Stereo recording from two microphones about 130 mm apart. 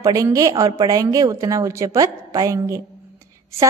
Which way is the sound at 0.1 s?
25° right (ahead or behind).